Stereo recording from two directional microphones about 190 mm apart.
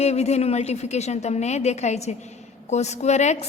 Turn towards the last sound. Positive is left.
turn(degrees=35)  # may be behind; listen again after turning